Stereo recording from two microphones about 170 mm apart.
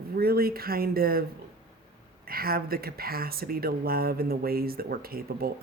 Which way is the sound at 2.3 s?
60° right (ahead or behind).